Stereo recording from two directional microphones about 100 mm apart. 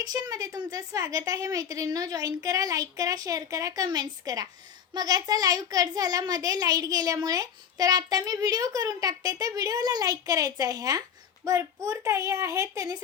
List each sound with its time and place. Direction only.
0.0 s a child's voice: 40° right (ahead or behind)